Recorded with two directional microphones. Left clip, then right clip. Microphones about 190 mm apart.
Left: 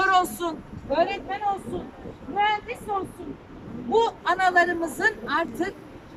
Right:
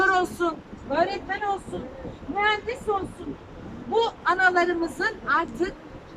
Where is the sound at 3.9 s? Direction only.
15° left (ahead or behind).